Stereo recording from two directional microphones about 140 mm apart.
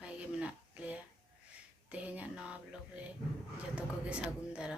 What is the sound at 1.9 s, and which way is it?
Speech, 10° right (ahead or behind).